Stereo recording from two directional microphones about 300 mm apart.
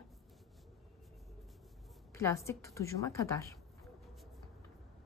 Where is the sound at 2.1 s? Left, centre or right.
Centre.